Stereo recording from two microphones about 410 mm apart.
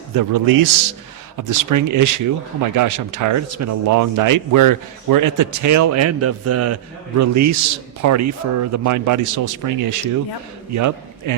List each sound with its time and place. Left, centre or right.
0.1 s a man's voice: right